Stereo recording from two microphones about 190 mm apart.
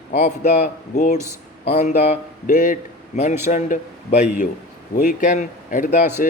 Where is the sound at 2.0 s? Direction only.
40° left (ahead or behind).